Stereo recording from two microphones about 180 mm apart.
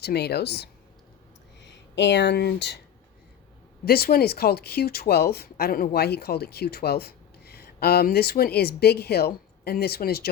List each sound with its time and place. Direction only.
0.0 s speech: 65° left (ahead or behind)
1.6 s speech: 75° left (ahead or behind)
3.8 s speech: 60° left (ahead or behind)